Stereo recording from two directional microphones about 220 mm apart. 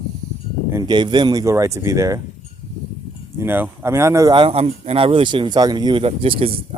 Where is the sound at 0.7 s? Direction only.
20° right (ahead or behind).